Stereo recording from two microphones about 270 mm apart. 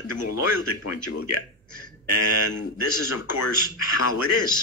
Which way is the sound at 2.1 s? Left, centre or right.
Left.